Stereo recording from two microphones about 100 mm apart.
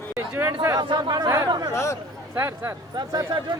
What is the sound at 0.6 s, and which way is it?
Speech, 35° right (ahead or behind).